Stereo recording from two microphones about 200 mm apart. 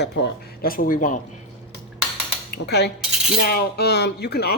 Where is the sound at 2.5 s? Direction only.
55° left (ahead or behind).